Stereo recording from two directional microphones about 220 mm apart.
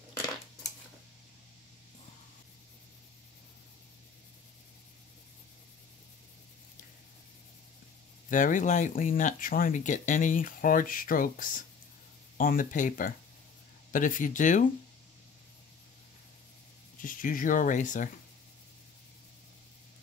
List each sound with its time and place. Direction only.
8.3 s speech: 35° left (ahead or behind)
17.0 s speech: 40° left (ahead or behind)